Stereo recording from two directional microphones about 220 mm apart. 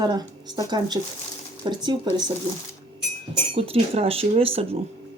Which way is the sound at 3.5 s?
25° right (ahead or behind).